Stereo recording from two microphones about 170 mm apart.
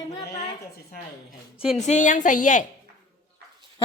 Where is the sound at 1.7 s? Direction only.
45° left (ahead or behind).